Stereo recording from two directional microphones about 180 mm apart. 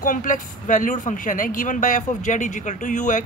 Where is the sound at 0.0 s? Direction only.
50° left (ahead or behind).